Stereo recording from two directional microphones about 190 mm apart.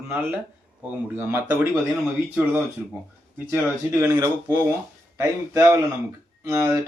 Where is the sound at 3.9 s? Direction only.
15° right (ahead or behind).